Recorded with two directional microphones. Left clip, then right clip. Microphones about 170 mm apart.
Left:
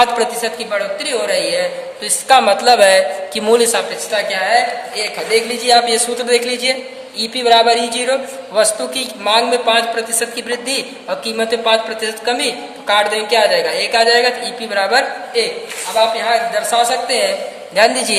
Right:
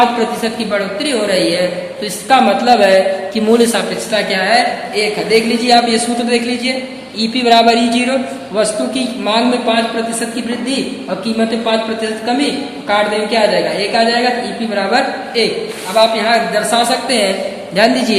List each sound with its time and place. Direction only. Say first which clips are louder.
0.2 s a woman's voice: right 1 dB; 35° left (ahead or behind)
2.2 s a woman's voice: even; 50° left (ahead or behind)
7.2 s a woman's voice: right 1 dB; 45° left (ahead or behind); by 10.2 s 60° left (ahead or behind)
11.3 s a woman's voice: left 1 dB; 65° left (ahead or behind)
15.4 s a woman's voice: right 2 dB; 40° left (ahead or behind)
16.0 s a woman's voice: right 3 dB; 30° left (ahead or behind)